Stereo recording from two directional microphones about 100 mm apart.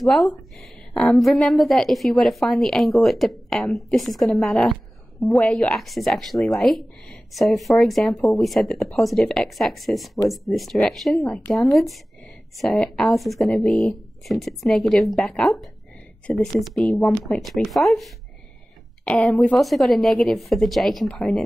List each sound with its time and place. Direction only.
0.0 s a woman's voice: centre (ahead or behind)
5.8 s a woman's voice: centre (ahead or behind)
19.0 s a woman's voice: 10° left (ahead or behind)
19.6 s a woman's voice: centre (ahead or behind)